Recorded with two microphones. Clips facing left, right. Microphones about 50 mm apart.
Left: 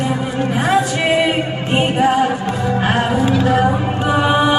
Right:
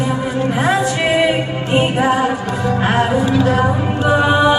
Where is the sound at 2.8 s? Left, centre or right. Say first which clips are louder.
Right 2 dB; centre.